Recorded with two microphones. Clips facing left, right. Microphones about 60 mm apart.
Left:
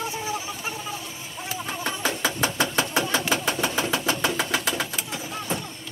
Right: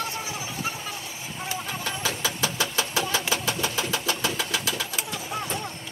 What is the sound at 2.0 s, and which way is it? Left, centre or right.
Engine, left.